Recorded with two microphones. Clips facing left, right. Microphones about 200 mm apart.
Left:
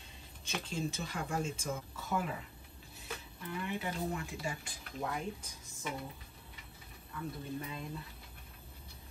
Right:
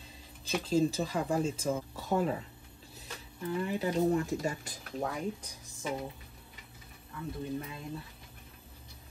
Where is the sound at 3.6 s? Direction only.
40° right (ahead or behind).